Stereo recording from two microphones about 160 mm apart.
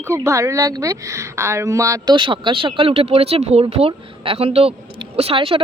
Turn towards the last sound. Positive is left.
turn(degrees=-35)  # may be behind; listen again after turning